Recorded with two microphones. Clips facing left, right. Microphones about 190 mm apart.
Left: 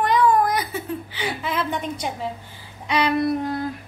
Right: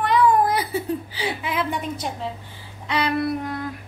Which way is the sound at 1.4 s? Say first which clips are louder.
Left 2 dB; 10° right (ahead or behind).